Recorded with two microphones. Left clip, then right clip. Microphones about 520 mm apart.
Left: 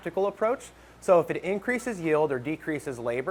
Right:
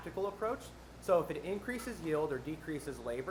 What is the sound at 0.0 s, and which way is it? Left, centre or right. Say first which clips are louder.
Speech: left 11 dB; left.